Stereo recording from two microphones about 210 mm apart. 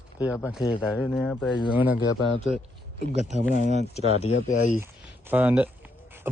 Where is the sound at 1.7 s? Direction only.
10° right (ahead or behind).